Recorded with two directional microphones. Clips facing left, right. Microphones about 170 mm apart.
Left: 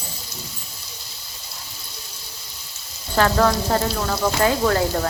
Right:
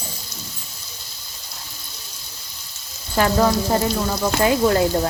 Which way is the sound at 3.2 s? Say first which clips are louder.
Even; 15° right (ahead or behind).